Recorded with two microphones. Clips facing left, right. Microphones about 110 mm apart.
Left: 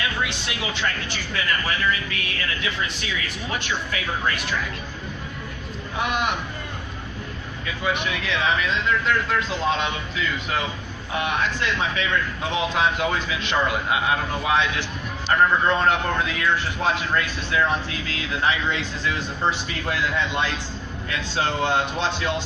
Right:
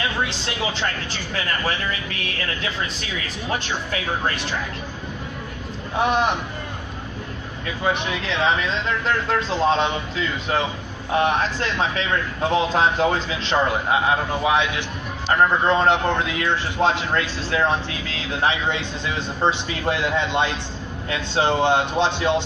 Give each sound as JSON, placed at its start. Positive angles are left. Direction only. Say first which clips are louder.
{"t": 0.0, "sound": "a man's voice", "louder": "right 2 dB", "side_deg": -30}
{"t": 6.0, "sound": "a man's voice", "louder": "right 5 dB", "side_deg": -30}
{"t": 7.9, "sound": "a man's voice", "louder": "right 2 dB", "side_deg": -30}